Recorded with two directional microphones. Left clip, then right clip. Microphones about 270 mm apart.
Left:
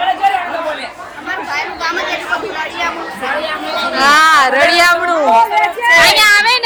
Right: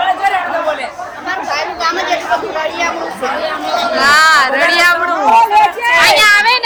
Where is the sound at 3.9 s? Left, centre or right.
Centre.